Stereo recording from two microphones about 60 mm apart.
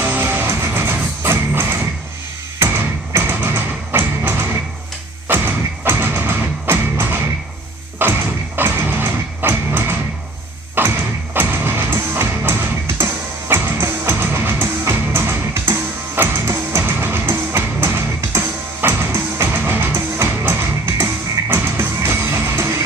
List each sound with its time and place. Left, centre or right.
0.0 s music: right
3.4 s music: right
10.8 s door: right
11.3 s music: right
16.8 s music: right